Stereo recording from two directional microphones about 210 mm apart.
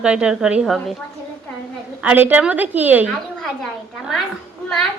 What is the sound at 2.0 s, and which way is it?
A woman's voice, 10° right (ahead or behind).